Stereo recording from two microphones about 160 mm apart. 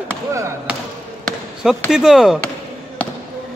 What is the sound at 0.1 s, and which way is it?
Basketball bounce, 15° right (ahead or behind).